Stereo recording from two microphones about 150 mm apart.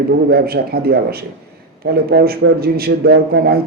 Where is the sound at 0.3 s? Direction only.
90° right.